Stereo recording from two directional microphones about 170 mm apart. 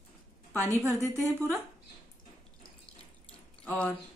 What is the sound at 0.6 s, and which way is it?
Speech, 20° right (ahead or behind).